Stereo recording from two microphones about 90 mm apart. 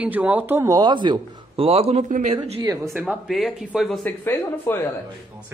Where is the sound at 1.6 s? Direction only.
90° right.